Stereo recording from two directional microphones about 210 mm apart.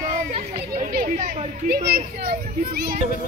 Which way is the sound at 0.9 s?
40° right (ahead or behind).